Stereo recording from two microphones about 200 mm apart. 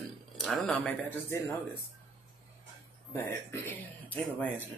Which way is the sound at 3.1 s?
10° left (ahead or behind).